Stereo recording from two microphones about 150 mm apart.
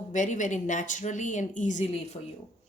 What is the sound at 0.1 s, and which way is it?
Speech, 55° left (ahead or behind).